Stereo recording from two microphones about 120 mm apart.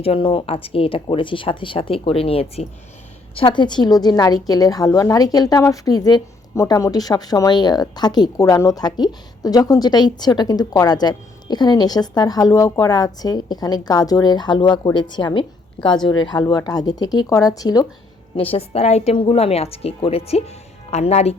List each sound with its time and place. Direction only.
0.0 s a woman's voice: 50° left (ahead or behind); by 17.8 s 30° left (ahead or behind)
18.3 s speech: 55° left (ahead or behind)